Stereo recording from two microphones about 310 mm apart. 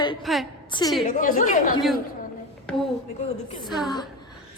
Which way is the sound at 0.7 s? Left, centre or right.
Centre.